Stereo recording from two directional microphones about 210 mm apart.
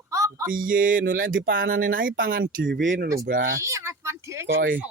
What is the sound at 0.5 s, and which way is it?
Speech, 40° right (ahead or behind).